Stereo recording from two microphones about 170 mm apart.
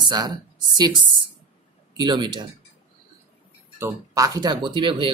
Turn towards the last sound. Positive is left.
turn(degrees=-30)  # may be behind; listen again after turning